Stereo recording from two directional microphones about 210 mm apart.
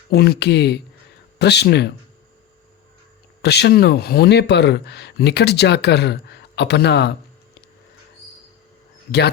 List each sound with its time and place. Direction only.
0.1 s speech: 50° left (ahead or behind)
3.4 s speech: 50° left (ahead or behind)